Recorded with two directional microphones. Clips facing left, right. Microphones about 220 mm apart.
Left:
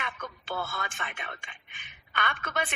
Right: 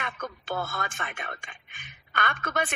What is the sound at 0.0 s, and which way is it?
A woman's voice, 45° right (ahead or behind).